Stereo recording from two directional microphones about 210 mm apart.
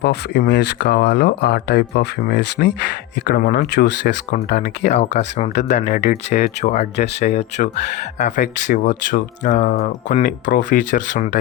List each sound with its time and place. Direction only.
0.0 s speech: 50° left (ahead or behind)
4.3 s speech: 40° left (ahead or behind)